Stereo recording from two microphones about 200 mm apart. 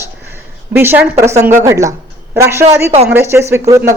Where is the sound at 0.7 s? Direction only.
10° right (ahead or behind).